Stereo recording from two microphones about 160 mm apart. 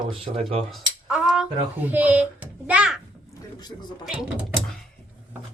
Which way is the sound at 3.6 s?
25° left (ahead or behind).